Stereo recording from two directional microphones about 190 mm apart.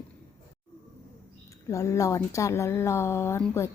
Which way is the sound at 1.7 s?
15° left (ahead or behind).